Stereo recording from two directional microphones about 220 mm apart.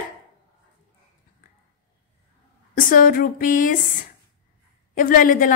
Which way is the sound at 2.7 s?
40° left (ahead or behind).